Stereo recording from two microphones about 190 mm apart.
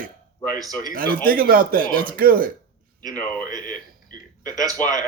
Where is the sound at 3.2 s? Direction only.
10° left (ahead or behind).